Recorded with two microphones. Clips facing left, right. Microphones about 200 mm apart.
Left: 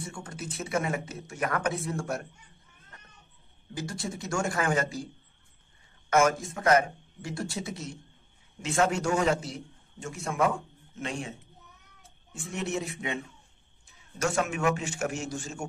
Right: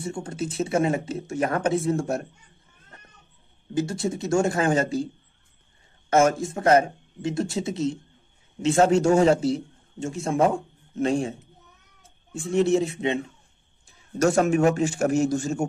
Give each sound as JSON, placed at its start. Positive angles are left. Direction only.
{"t": 0.0, "sound": "speech", "side_deg": -25}
{"t": 3.7, "sound": "a man's voice", "side_deg": -25}
{"t": 6.0, "sound": "a man's voice", "side_deg": -30}
{"t": 12.4, "sound": "a man's voice", "side_deg": -30}